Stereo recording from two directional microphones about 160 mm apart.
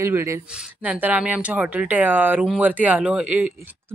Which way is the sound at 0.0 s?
15° right (ahead or behind).